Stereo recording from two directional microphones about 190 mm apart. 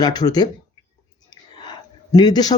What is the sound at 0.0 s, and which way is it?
Speech, 20° left (ahead or behind).